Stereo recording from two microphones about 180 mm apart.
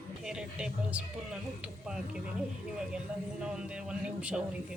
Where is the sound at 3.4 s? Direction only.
5° right (ahead or behind).